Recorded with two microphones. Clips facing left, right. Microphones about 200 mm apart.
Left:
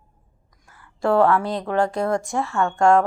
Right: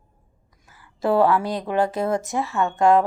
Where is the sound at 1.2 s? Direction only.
20° right (ahead or behind).